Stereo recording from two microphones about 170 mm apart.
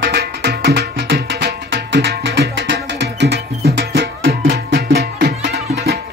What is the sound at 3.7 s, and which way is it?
Music, 65° right (ahead or behind).